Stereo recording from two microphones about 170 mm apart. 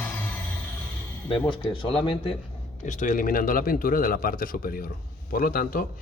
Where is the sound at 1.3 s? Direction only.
30° left (ahead or behind).